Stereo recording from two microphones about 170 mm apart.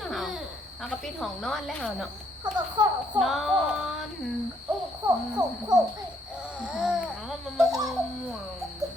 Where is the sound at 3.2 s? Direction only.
Centre (ahead or behind).